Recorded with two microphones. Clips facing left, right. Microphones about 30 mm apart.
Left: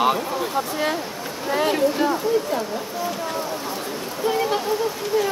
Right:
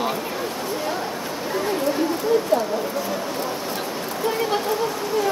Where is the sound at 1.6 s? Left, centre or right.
Left.